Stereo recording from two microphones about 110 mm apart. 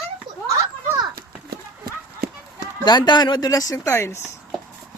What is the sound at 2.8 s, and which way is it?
Speech, 40° left (ahead or behind).